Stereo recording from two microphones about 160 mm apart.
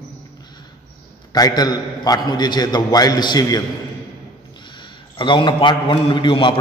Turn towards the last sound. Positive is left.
turn(degrees=30)  # may be behind; listen again after turning